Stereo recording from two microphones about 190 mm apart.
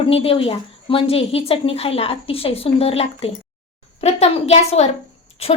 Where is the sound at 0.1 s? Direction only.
30° left (ahead or behind).